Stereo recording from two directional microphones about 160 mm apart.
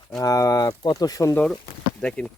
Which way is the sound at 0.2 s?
20° left (ahead or behind).